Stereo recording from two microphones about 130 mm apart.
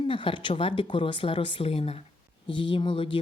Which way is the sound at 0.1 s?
40° left (ahead or behind).